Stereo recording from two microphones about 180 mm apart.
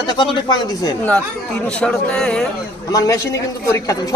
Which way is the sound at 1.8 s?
5° left (ahead or behind).